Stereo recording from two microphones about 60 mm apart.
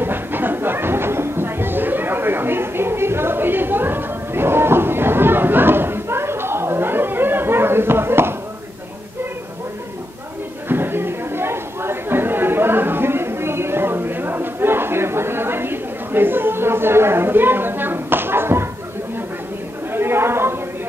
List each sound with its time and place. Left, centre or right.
0.0 s a sound: right
10.7 s chatter: right
19.9 s chatter: right